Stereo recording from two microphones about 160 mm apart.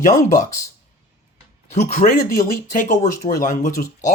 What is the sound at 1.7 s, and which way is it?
Speech, 50° left (ahead or behind).